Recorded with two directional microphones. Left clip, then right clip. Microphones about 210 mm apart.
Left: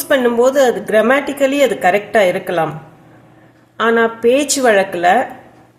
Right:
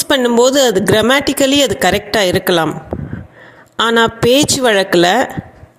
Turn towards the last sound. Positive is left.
turn(degrees=-45)  # may be behind; listen again after turning